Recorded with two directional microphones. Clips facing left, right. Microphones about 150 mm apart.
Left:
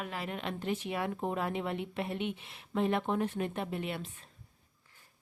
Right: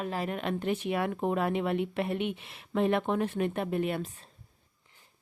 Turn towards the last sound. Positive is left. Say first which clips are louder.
# right 6 dB
turn(degrees=-50)  # may be behind; listen again after turning